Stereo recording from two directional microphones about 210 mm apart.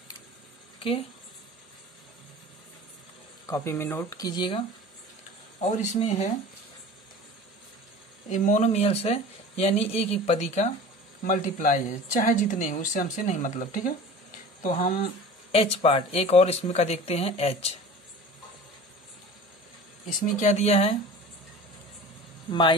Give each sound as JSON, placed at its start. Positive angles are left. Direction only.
{"t": 3.4, "sound": "speech", "side_deg": 15}
{"t": 5.6, "sound": "speech", "side_deg": 35}
{"t": 8.3, "sound": "speech", "side_deg": 35}
{"t": 15.5, "sound": "speech", "side_deg": 30}
{"t": 20.3, "sound": "speech", "side_deg": 35}
{"t": 22.5, "sound": "speech", "side_deg": 20}